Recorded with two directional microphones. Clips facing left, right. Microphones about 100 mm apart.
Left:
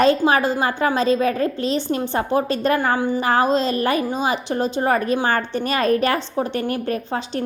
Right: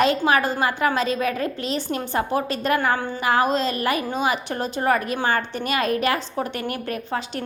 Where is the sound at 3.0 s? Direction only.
15° left (ahead or behind).